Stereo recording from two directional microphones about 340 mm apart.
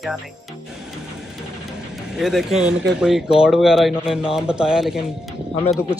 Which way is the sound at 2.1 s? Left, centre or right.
Centre.